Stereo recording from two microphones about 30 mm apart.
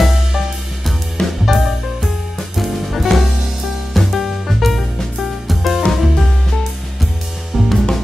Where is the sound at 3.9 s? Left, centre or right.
Centre.